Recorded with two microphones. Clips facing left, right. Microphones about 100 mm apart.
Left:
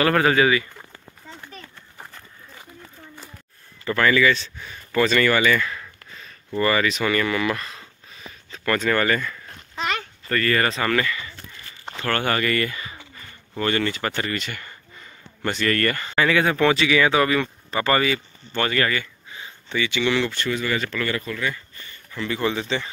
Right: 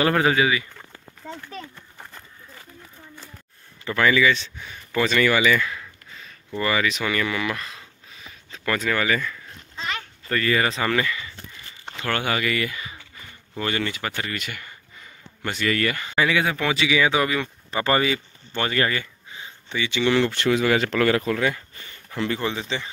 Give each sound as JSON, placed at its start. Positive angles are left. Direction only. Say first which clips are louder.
{"t": 0.1, "sound": "speech", "louder": "left 2 dB", "side_deg": -10}
{"t": 3.8, "sound": "speech", "louder": "left 1 dB", "side_deg": -10}
{"t": 9.8, "sound": "a sound", "louder": "left 4 dB", "side_deg": 75}
{"t": 10.2, "sound": "speech", "louder": "even", "side_deg": -15}
{"t": 20.3, "sound": "speech", "louder": "right 5 dB", "side_deg": -85}
{"t": 22.4, "sound": "speech", "louder": "left 3 dB", "side_deg": -20}